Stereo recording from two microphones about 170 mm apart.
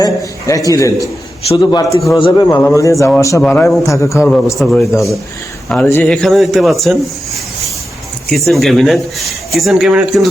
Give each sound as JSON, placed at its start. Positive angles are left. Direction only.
{"t": 0.0, "sound": "a man's voice", "side_deg": 20}
{"t": 2.6, "sound": "a man's voice", "side_deg": 15}
{"t": 3.4, "sound": "a man's voice", "side_deg": 10}
{"t": 4.5, "sound": "speech", "side_deg": 0}
{"t": 8.3, "sound": "speech", "side_deg": 0}